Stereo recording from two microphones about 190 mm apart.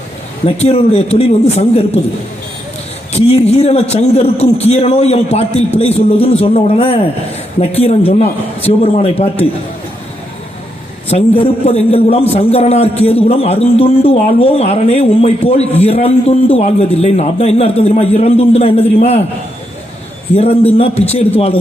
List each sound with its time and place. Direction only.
0.4 s a man's voice: 35° left (ahead or behind)
3.1 s a man's voice: 35° left (ahead or behind)
11.1 s a man's voice: 35° left (ahead or behind)
20.3 s a man's voice: 35° left (ahead or behind)